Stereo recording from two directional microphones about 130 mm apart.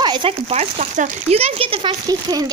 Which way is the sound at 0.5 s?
60° right (ahead or behind).